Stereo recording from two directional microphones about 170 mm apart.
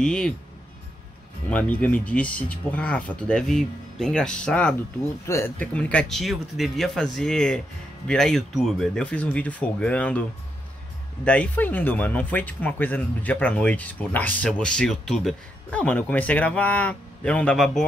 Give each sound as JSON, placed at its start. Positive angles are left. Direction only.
{"t": 0.0, "sound": "speech", "side_deg": 5}
{"t": 1.5, "sound": "speech", "side_deg": 10}
{"t": 11.2, "sound": "speech", "side_deg": 10}